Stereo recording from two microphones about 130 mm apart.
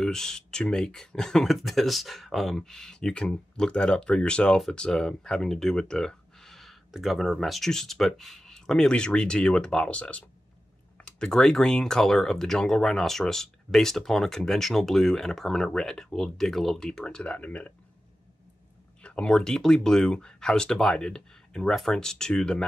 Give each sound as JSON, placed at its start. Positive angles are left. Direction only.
{"t": 0.0, "sound": "speech", "side_deg": 5}
{"t": 19.0, "sound": "speech", "side_deg": 5}